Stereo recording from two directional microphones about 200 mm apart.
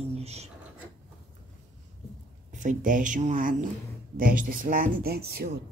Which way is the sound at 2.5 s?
40° right (ahead or behind).